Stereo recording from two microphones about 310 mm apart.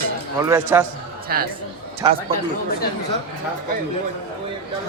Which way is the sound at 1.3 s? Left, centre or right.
Right.